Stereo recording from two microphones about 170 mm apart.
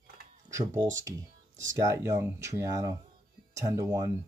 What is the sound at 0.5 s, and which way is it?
Speech, 20° right (ahead or behind).